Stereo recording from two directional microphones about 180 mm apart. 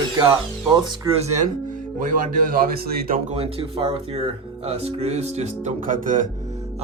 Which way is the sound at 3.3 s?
30° right (ahead or behind).